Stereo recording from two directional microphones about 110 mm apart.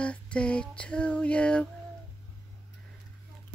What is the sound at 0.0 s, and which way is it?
Female singing, 10° left (ahead or behind).